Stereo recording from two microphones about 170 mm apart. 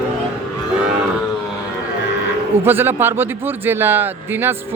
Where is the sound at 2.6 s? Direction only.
10° right (ahead or behind).